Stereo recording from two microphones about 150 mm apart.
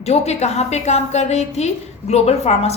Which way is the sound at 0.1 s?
45° left (ahead or behind).